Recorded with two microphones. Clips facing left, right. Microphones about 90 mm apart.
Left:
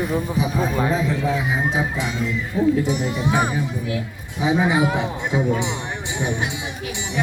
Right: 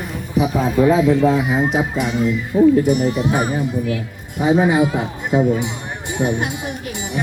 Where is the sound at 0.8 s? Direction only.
35° left (ahead or behind).